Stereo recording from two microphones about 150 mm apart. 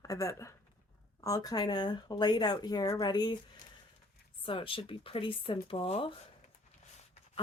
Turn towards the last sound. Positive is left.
turn(degrees=40)  # may be behind; listen again after turning